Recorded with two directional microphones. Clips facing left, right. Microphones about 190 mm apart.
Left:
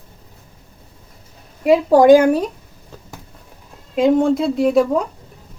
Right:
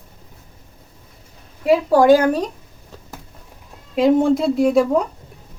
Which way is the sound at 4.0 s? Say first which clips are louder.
Even; centre (ahead or behind).